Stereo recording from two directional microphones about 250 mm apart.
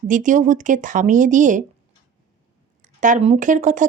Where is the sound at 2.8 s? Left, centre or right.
Right.